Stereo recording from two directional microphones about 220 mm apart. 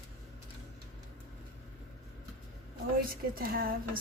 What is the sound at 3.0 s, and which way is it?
A woman's voice, 40° right (ahead or behind).